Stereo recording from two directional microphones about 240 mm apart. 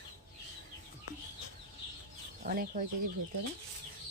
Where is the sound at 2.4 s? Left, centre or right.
Right.